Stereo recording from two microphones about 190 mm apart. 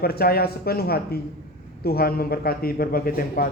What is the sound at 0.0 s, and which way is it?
A woman's voice, 55° left (ahead or behind).